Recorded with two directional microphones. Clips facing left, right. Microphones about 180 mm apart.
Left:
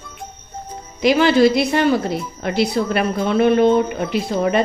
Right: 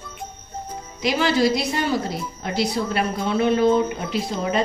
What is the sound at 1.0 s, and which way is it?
A woman's voice, 60° left (ahead or behind).